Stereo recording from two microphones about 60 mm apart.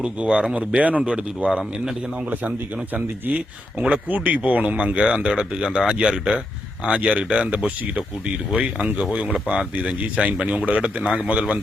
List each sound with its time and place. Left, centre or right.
0.0 s speech: centre
1.5 s speech: centre
2.9 s speech: right